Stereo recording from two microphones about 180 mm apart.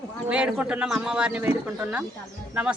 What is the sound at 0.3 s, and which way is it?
A woman's voice, 5° right (ahead or behind).